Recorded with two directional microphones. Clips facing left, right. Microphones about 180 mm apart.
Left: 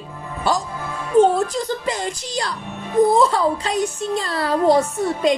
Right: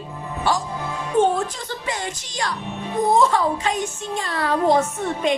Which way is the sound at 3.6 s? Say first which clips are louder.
Left 3 dB; 35° left (ahead or behind).